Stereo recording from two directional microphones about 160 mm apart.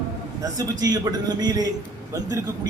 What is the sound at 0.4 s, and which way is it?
A man's voice, 25° right (ahead or behind).